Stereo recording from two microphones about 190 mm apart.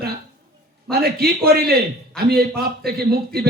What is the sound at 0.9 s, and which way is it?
A man's voice, 55° right (ahead or behind).